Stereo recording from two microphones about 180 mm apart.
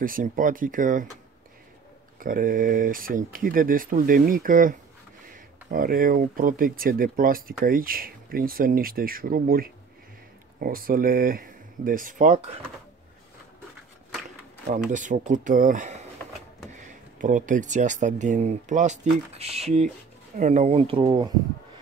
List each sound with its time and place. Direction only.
0.0 s speech: 50° right (ahead or behind)
2.1 s speech: 50° right (ahead or behind)
14.9 s speech: 45° right (ahead or behind); by 21.3 s 25° right (ahead or behind)